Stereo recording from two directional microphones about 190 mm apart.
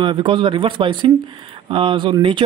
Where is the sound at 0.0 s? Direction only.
25° right (ahead or behind).